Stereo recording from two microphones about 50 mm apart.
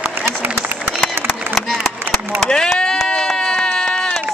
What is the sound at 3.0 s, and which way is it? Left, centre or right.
Run, centre.